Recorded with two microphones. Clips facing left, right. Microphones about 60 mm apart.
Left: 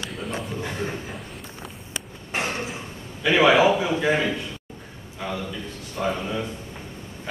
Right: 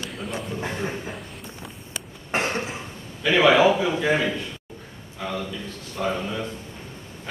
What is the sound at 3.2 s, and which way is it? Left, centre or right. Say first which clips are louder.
Speech: even; centre.